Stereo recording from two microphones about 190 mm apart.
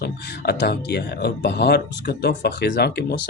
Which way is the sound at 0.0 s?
65° left (ahead or behind).